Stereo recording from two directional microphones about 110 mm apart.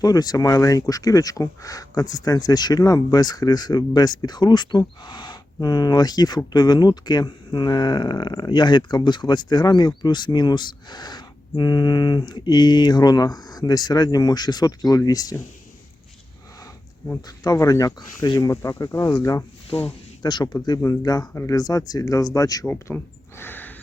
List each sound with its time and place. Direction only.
0.0 s speech: 35° left (ahead or behind)
17.2 s speech: 35° left (ahead or behind)
22.6 s speech: 20° left (ahead or behind)
23.4 s snort: 20° left (ahead or behind)